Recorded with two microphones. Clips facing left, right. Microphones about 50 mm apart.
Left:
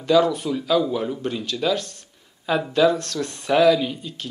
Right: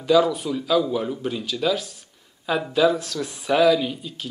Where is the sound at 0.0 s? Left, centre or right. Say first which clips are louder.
Even; centre.